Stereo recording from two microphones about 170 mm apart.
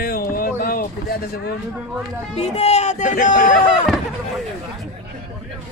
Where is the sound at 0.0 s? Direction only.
60° left (ahead or behind).